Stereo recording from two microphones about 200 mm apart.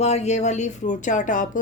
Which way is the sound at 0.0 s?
35° left (ahead or behind).